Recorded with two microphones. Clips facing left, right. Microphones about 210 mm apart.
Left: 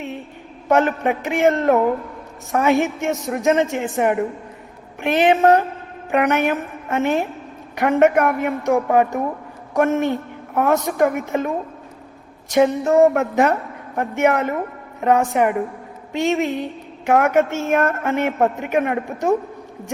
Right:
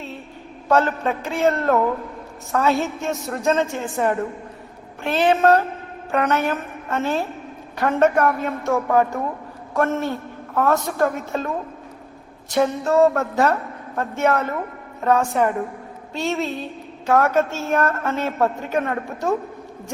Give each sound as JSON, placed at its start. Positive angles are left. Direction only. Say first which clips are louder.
{"t": 0.7, "sound": "a woman's voice", "louder": "left 2 dB", "side_deg": 20}